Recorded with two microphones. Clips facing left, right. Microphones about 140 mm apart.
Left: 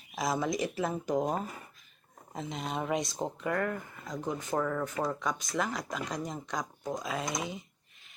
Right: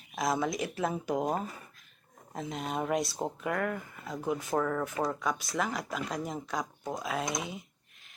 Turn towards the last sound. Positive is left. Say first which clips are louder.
# right 1 dB
turn(degrees=0)  # may be behind; listen again after turning